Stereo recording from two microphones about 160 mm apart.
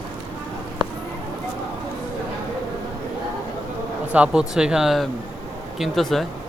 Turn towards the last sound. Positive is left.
turn(degrees=0)  # may be behind; listen again after turning